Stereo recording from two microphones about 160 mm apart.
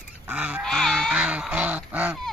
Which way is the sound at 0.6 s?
Centre (ahead or behind).